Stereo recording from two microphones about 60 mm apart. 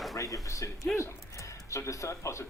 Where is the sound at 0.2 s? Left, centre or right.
Left.